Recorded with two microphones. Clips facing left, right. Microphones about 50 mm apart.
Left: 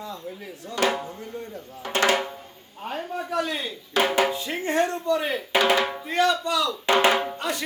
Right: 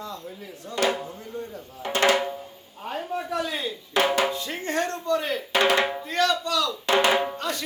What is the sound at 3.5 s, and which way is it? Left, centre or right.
Speech, centre.